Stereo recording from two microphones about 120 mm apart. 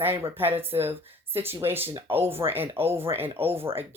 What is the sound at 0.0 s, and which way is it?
Speech, 20° right (ahead or behind).